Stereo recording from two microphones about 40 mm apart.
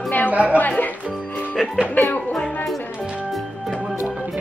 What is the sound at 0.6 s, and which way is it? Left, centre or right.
Speech, left.